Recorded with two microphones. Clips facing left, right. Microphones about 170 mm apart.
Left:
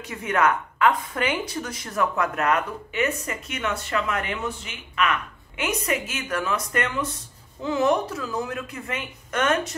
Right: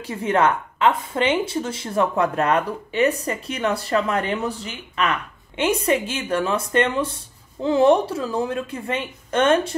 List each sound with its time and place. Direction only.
0.0 s speech: 30° right (ahead or behind)